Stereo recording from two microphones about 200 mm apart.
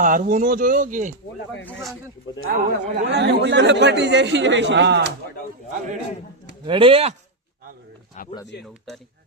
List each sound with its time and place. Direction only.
0.0 s speech: 40° right (ahead or behind)
2.5 s a man's voice: 50° right (ahead or behind)
6.7 s speech: 25° right (ahead or behind)